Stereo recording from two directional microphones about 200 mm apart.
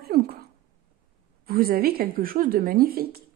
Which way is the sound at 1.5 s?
50° right (ahead or behind).